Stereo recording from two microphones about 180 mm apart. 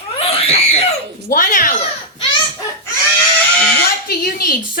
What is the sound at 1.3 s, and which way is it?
Speech, 50° left (ahead or behind).